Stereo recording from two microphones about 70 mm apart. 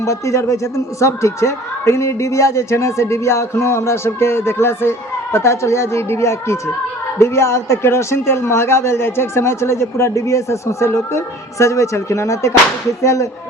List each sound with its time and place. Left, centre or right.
0.0 s a woman's voice: left